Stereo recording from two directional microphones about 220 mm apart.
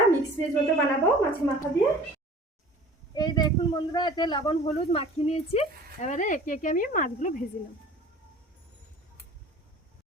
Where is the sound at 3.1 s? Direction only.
20° left (ahead or behind); by 7.3 s 35° left (ahead or behind).